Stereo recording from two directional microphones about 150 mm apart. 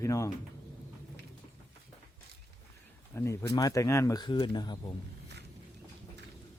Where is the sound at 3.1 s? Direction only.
20° left (ahead or behind).